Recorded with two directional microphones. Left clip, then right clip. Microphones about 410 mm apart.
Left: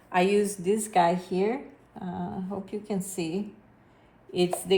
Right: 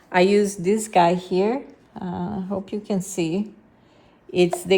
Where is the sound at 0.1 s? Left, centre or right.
Right.